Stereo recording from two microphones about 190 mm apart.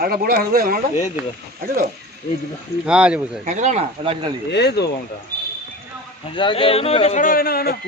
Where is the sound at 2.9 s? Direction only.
5° right (ahead or behind).